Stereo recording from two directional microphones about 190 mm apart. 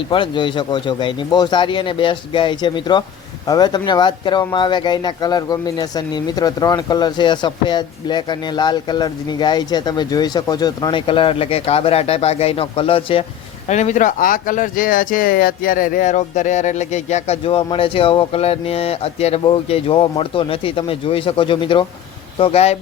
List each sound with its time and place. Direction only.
0.1 s speech: 25° left (ahead or behind)